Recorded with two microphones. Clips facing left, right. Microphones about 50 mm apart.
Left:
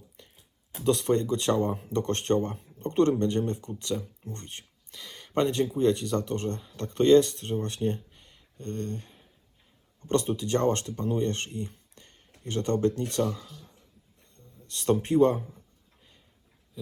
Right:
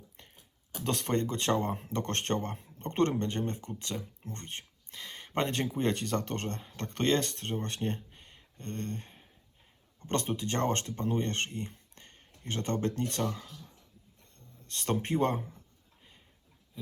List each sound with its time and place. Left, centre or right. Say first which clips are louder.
0.2 s a sound: left 3 dB; right
0.9 s speech: left 7 dB; right
5.5 s speech: left 6 dB; right
6.6 s speech: left 7 dB; right
13.3 s speech: left 2 dB; right
14.7 s speech: left 6 dB; right
16.8 s a sound: left 4 dB; right